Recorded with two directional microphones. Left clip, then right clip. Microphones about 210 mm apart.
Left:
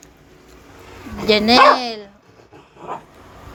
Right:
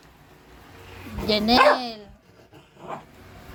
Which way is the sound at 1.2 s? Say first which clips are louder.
Left 6 dB; 20° left (ahead or behind).